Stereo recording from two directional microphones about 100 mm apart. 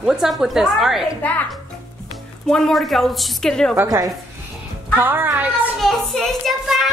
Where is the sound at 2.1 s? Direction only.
5° left (ahead or behind).